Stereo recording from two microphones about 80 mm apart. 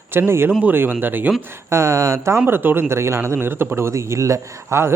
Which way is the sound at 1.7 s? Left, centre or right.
Right.